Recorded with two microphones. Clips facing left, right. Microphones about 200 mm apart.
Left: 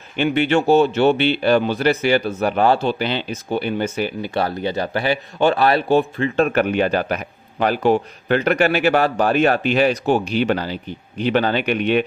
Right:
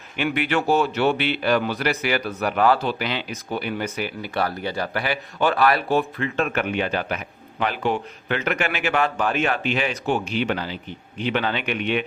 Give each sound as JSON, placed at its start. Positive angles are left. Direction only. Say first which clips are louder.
{"t": 0.2, "sound": "a man's voice", "louder": "left 6 dB", "side_deg": 25}